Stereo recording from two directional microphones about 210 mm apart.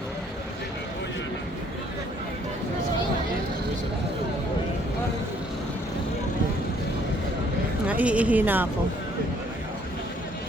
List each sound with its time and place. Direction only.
7.9 s speech: 5° right (ahead or behind)